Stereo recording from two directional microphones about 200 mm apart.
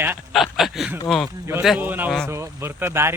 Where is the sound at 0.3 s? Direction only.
Centre (ahead or behind).